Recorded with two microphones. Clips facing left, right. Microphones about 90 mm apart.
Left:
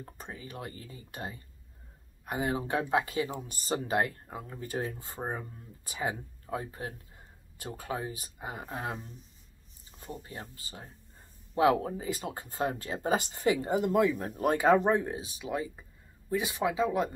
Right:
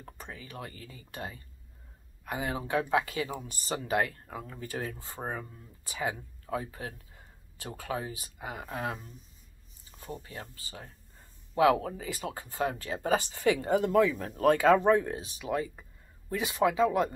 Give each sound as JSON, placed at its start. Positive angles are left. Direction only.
{"t": 0.0, "sound": "speech", "side_deg": 30}
{"t": 6.5, "sound": "speech", "side_deg": 30}
{"t": 9.9, "sound": "a sound", "side_deg": 15}
{"t": 10.5, "sound": "speech", "side_deg": 30}